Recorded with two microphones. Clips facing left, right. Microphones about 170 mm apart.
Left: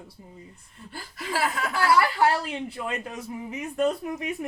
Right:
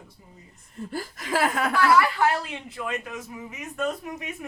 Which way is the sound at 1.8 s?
35° left (ahead or behind).